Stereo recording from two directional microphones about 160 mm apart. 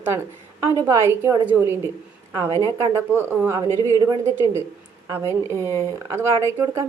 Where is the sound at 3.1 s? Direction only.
15° right (ahead or behind).